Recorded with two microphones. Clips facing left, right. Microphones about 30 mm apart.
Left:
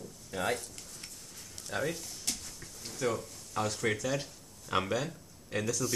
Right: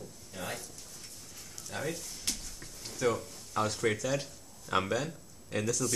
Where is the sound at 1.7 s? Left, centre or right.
Centre.